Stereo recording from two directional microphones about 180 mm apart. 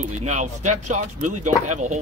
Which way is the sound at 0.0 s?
40° right (ahead or behind).